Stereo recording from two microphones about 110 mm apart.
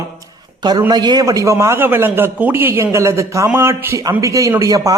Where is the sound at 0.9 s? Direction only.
40° right (ahead or behind).